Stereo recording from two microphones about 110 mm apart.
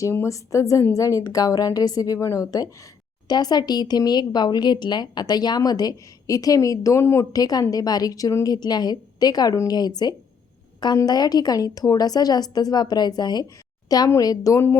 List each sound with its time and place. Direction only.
0.0 s a woman's voice: 25° left (ahead or behind)